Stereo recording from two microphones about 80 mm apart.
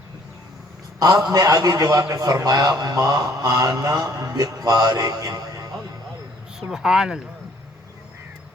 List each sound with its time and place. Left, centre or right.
0.9 s a man's voice: right
6.6 s speech: centre